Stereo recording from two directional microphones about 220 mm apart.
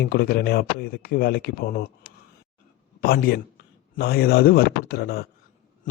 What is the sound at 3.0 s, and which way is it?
Speech, 45° left (ahead or behind).